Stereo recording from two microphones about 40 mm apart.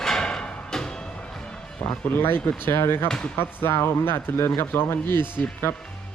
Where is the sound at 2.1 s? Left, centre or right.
Left.